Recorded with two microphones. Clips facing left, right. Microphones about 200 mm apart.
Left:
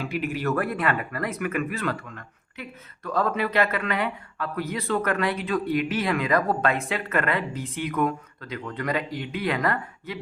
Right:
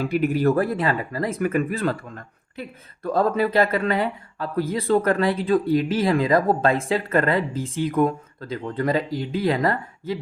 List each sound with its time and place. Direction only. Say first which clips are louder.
0.0 s speech: right 7 dB; 40° right (ahead or behind)